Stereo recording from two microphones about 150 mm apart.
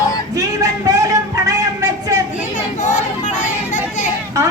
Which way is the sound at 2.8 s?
55° left (ahead or behind).